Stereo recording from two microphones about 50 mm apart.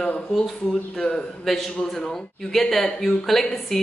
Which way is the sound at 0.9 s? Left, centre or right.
Centre.